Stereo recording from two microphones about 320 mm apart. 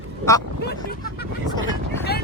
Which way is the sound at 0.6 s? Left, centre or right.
Left.